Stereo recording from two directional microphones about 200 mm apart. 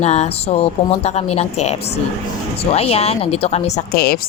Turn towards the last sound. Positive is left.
turn(degrees=50)  # may be behind; listen again after turning